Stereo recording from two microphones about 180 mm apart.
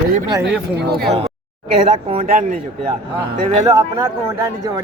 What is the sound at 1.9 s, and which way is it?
Speech, 30° right (ahead or behind).